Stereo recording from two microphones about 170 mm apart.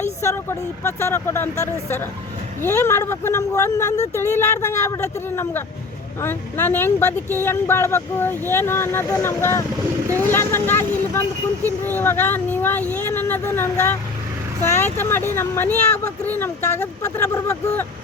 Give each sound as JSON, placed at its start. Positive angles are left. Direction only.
{"t": 0.2, "sound": "speech", "side_deg": 15}